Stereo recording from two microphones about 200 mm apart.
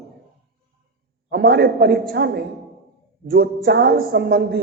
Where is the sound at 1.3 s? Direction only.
50° right (ahead or behind).